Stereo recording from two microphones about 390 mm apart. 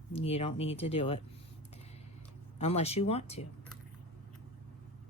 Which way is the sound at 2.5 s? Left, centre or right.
Centre.